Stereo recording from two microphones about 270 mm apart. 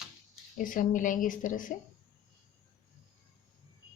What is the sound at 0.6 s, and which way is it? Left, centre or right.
Speech, left.